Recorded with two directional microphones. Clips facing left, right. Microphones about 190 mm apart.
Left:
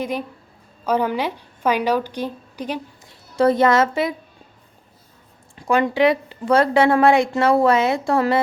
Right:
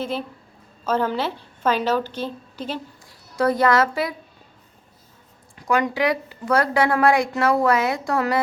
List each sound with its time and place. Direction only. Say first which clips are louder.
0.0 s a woman's voice: left 2 dB; 15° left (ahead or behind)
3.3 s a woman's voice: left 3 dB; 25° left (ahead or behind)
5.5 s a woman's voice: left 4 dB; 25° left (ahead or behind)